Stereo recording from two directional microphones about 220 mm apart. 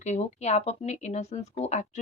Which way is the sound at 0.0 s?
30° left (ahead or behind).